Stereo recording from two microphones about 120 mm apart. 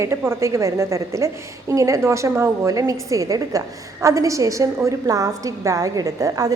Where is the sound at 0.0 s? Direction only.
25° right (ahead or behind).